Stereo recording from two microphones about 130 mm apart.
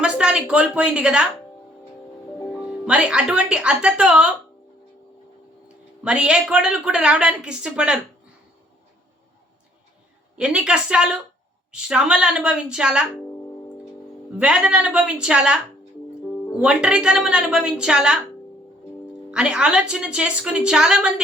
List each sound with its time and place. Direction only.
0.0 s speech: 5° right (ahead or behind)
2.4 s music: 25° left (ahead or behind)
2.6 s speech: 5° right (ahead or behind)
5.6 s speech: 5° right (ahead or behind)
10.3 s speech: 5° right (ahead or behind)
14.3 s speech: 5° right (ahead or behind)
16.6 s a woman's voice: 5° right (ahead or behind)
19.3 s speech: 5° right (ahead or behind)